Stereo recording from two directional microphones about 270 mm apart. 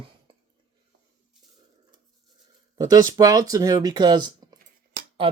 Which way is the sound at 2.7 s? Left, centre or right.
Centre.